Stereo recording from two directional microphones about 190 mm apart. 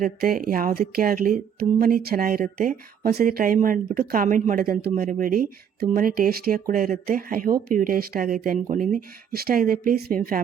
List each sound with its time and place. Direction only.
0.0 s speech: 50° right (ahead or behind)